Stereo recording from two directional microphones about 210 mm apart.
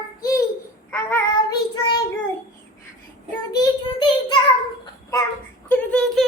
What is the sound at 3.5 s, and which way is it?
Child singing, 20° left (ahead or behind).